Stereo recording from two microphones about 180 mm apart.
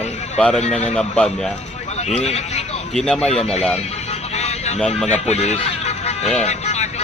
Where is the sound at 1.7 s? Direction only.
40° left (ahead or behind).